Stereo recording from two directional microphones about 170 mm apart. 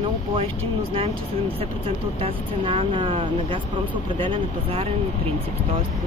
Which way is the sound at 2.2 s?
30° right (ahead or behind).